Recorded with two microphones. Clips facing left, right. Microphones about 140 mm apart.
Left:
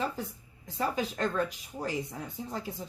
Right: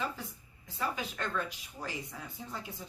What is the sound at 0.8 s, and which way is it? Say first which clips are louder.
Speech: left 6 dB; 35° left (ahead or behind).